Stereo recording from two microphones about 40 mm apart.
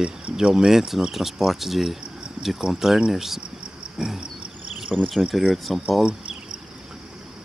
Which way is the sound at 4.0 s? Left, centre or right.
Centre.